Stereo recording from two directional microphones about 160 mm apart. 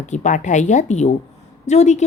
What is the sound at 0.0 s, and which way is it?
Speech, 50° left (ahead or behind).